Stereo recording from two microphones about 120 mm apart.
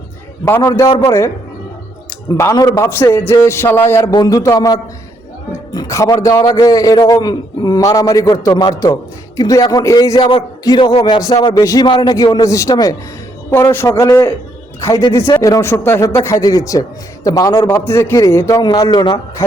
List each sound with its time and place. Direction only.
0.4 s a man's voice: 20° left (ahead or behind)
0.7 s a man's voice: 30° left (ahead or behind)
2.4 s a man's voice: 25° left (ahead or behind)
4.1 s a man's voice: 35° left (ahead or behind)
11.2 s a man's voice: 30° left (ahead or behind)
11.9 s a man's voice: 45° left (ahead or behind)